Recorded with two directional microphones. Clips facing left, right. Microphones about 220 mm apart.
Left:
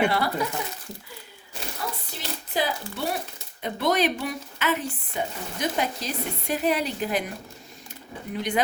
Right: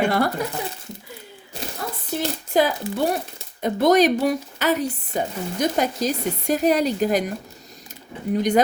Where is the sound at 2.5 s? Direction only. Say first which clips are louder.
Right 8 dB; 45° right (ahead or behind).